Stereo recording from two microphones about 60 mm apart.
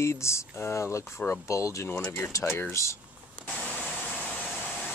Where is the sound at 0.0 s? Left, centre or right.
Left.